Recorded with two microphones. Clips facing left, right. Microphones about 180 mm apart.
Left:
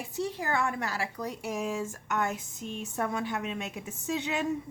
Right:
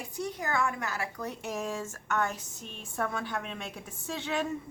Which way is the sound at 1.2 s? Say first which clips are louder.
Left 2 dB; 10° left (ahead or behind).